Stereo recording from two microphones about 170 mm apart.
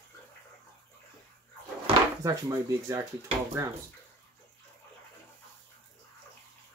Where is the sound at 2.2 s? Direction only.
20° right (ahead or behind).